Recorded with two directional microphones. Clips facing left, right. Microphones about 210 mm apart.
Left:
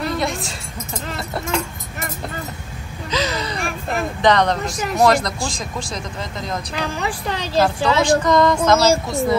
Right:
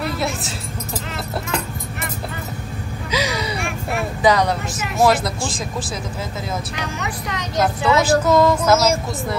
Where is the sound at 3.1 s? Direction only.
10° right (ahead or behind).